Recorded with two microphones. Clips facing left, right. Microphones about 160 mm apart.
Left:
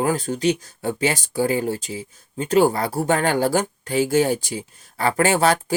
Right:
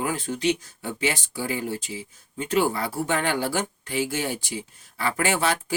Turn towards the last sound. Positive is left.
turn(degrees=40)  # may be behind; listen again after turning